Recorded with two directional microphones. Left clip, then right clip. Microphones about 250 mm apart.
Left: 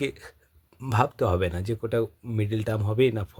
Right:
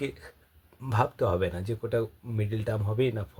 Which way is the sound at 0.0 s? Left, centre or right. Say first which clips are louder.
Left 4 dB; left.